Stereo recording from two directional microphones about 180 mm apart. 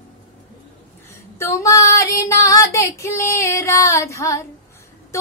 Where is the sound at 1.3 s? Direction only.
15° left (ahead or behind).